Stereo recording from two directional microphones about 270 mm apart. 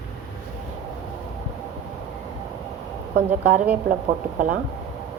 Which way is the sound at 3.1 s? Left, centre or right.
Right.